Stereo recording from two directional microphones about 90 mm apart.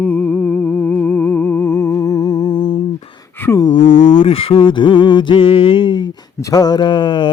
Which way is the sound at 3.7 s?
90° left.